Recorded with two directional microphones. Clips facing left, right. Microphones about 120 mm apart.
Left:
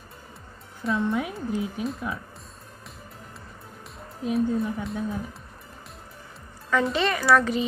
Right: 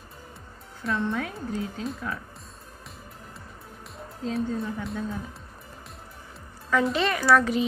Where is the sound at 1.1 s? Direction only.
15° left (ahead or behind).